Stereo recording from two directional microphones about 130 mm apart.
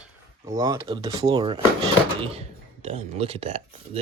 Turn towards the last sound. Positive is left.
turn(degrees=-50)  # may be behind; listen again after turning